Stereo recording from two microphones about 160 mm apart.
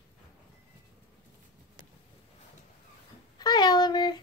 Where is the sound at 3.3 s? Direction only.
25° left (ahead or behind).